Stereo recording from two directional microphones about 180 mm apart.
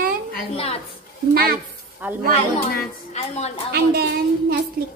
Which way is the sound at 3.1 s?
40° left (ahead or behind).